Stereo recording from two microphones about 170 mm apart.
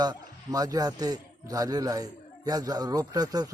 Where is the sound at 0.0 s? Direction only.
20° right (ahead or behind).